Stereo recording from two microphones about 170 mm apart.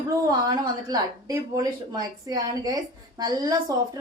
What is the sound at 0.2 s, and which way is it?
A woman's voice, 20° right (ahead or behind).